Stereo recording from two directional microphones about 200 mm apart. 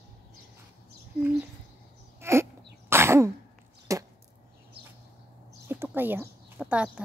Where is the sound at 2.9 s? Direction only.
15° right (ahead or behind).